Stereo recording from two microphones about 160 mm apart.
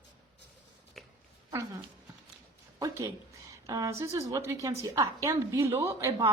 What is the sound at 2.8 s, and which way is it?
A woman's voice, 20° right (ahead or behind).